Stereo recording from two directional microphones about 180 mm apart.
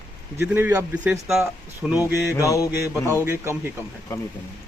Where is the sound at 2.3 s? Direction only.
15° left (ahead or behind).